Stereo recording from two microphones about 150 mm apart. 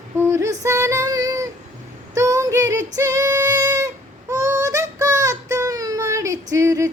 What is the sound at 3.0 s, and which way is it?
Singing, 20° right (ahead or behind).